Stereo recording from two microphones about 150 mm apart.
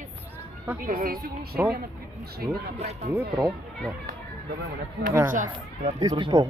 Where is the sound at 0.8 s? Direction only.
75° right (ahead or behind); by 2.6 s 90° right.